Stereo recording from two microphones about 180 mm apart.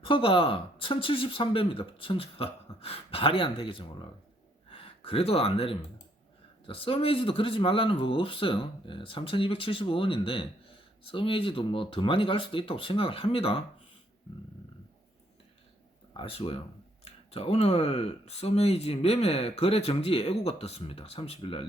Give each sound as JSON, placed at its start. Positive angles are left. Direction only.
{"t": 0.0, "sound": "speech", "side_deg": 30}
{"t": 16.1, "sound": "speech", "side_deg": 30}